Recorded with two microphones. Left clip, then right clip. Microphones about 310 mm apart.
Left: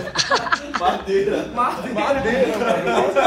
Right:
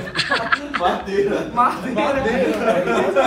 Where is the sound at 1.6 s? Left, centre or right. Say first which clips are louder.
Right 6 dB; centre.